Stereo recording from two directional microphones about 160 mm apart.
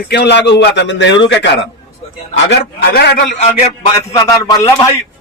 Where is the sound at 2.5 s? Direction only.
90° left.